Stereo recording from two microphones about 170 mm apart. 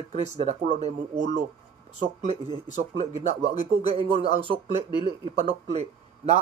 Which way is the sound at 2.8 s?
40° right (ahead or behind).